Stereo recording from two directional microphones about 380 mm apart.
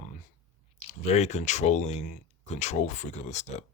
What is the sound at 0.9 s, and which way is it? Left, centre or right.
Speech, centre.